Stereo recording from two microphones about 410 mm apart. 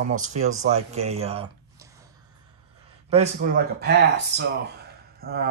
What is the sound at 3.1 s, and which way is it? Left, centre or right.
Speech, centre.